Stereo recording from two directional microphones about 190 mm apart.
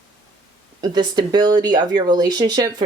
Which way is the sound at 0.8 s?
20° right (ahead or behind).